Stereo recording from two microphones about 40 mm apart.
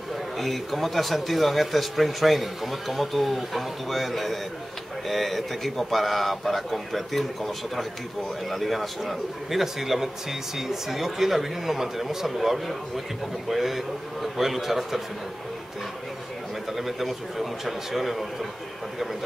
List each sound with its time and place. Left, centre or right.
0.4 s speech: centre
16.7 s speech: centre